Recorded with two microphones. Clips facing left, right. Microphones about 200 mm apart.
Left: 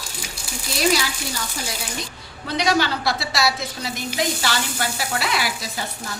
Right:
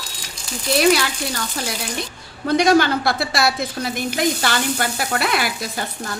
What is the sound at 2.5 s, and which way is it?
A woman's voice, 50° right (ahead or behind).